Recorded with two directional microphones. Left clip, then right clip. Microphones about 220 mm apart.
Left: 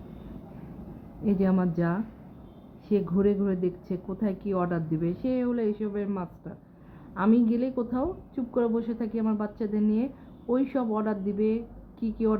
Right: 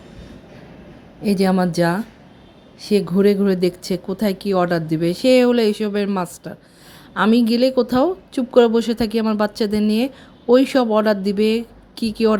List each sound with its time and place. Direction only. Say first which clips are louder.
1.2 s speech: right 9 dB; 35° right (ahead or behind)